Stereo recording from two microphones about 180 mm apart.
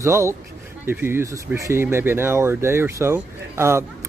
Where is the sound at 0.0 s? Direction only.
15° right (ahead or behind).